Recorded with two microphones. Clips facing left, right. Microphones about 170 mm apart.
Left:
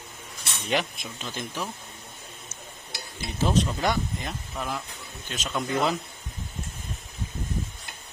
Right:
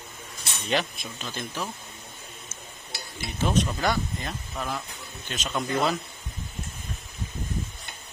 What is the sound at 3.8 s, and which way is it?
Speech, 15° left (ahead or behind).